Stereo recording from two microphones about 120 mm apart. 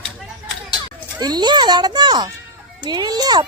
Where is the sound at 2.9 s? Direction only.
35° right (ahead or behind).